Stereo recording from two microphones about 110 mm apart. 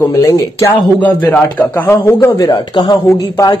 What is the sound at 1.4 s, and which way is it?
A man's voice, 15° left (ahead or behind).